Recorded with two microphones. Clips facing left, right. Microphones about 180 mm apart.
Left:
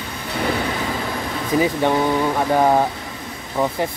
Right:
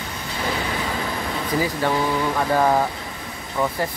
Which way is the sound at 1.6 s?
20° left (ahead or behind).